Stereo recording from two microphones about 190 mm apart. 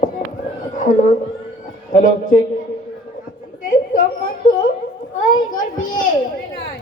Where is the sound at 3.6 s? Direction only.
45° left (ahead or behind).